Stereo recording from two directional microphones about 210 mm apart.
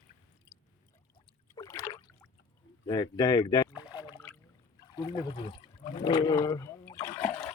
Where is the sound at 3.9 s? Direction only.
20° left (ahead or behind).